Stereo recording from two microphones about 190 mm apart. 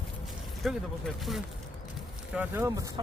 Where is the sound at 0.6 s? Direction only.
Centre (ahead or behind).